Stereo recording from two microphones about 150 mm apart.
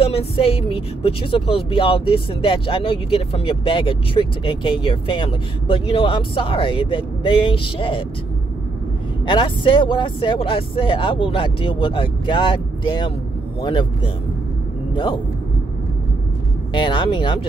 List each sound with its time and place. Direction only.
0.0 s speech: 40° left (ahead or behind)
9.2 s speech: 35° left (ahead or behind)
16.7 s speech: 30° left (ahead or behind)